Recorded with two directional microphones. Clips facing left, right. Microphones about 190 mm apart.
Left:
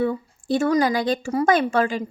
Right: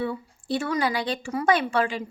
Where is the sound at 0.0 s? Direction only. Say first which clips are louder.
Left 6 dB; 45° left (ahead or behind).